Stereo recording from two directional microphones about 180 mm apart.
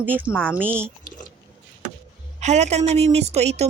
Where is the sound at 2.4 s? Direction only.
40° right (ahead or behind).